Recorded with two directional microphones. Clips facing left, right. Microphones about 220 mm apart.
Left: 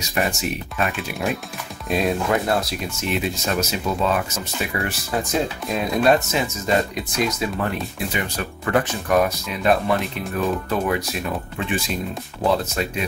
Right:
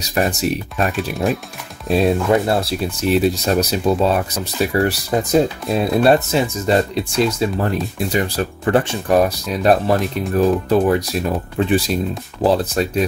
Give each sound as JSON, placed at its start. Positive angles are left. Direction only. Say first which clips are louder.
{"t": 0.1, "sound": "speech", "louder": "right 5 dB", "side_deg": -35}
{"t": 1.1, "sound": "speech", "louder": "right 5 dB", "side_deg": 0}
{"t": 1.9, "sound": "speech", "louder": "right 6 dB", "side_deg": -30}